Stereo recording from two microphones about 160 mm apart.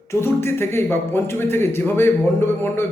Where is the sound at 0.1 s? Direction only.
15° left (ahead or behind).